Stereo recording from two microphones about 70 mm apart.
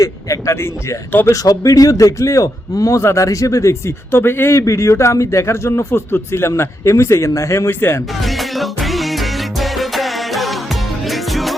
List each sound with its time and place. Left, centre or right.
0.0 s speech: left
1.3 s a man's voice: left
7.7 s speech: left
8.2 s music: centre